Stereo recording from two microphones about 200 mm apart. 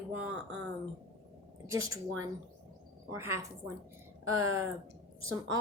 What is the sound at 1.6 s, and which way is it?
Speech, 90° right.